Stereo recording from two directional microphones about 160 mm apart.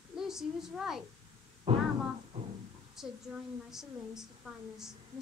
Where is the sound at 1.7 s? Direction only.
35° right (ahead or behind).